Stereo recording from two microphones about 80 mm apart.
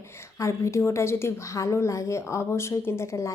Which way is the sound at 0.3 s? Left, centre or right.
Left.